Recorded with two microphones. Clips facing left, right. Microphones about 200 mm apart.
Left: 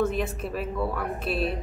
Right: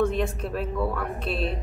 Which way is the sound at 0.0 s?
5° left (ahead or behind).